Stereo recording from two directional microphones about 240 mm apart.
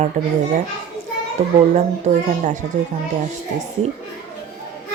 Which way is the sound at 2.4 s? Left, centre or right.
Right.